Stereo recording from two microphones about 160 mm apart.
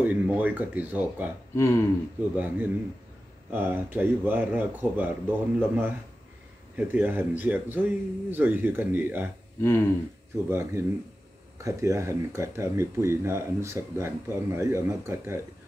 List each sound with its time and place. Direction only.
0.0 s speech: 10° right (ahead or behind)
1.5 s speech: 15° left (ahead or behind)
2.3 s speech: 10° right (ahead or behind)
9.6 s speech: 15° left (ahead or behind)
10.5 s speech: 15° right (ahead or behind)